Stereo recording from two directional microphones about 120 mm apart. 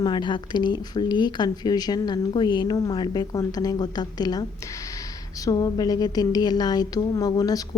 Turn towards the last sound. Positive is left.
turn(degrees=35)  # may be behind; listen again after turning